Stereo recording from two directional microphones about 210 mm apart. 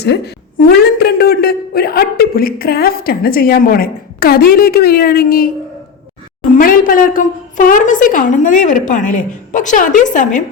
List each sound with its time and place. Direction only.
0.6 s a man's voice: 45° left (ahead or behind)
6.6 s a woman's voice: 40° left (ahead or behind)